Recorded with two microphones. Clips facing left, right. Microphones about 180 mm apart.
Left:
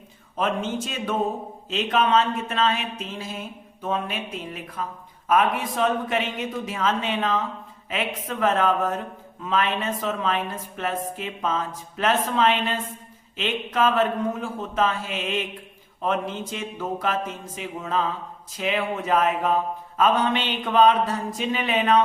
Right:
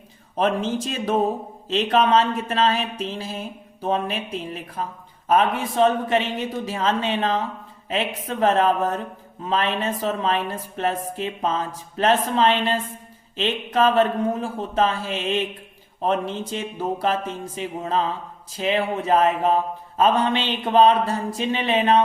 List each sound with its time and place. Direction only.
0.3 s a man's voice: 35° right (ahead or behind)